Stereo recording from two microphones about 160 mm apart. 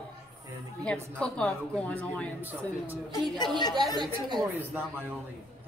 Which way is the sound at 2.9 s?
25° left (ahead or behind).